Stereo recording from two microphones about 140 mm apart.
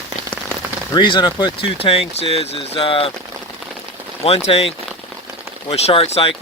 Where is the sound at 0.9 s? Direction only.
35° left (ahead or behind).